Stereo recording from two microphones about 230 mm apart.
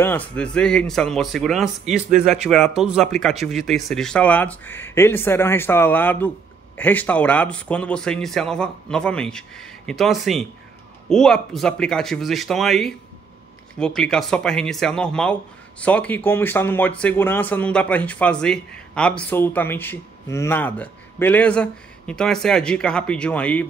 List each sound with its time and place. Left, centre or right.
0.0 s speech: centre
2.0 s speech: right
2.3 s speech: centre